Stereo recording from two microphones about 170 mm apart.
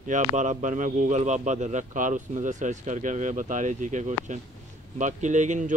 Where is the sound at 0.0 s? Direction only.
45° right (ahead or behind).